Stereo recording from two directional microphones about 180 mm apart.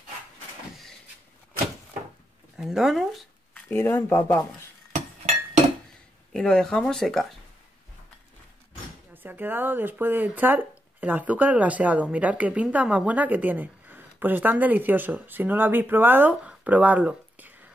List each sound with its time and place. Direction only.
2.5 s speech: centre (ahead or behind); by 4.6 s 15° left (ahead or behind)
4.9 s chink: 45° right (ahead or behind)
6.3 s speech: 5° left (ahead or behind)
9.1 s a woman's voice: 10° right (ahead or behind)